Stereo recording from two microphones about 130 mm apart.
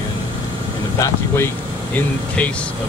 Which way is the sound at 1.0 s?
20° left (ahead or behind).